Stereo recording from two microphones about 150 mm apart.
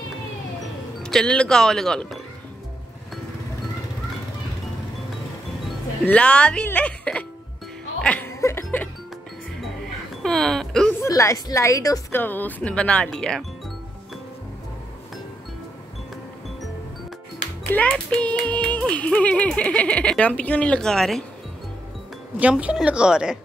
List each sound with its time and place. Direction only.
1.0 s speech: 5° left (ahead or behind)
6.0 s speech: 5° left (ahead or behind)
8.0 s chuckle: 10° left (ahead or behind)
10.2 s a sound: centre (ahead or behind)
11.0 s a woman's voice: 20° left (ahead or behind)
12.2 s speech: 10° left (ahead or behind)
17.6 s speech: 10° left (ahead or behind)
22.4 s a woman's voice: 10° right (ahead or behind)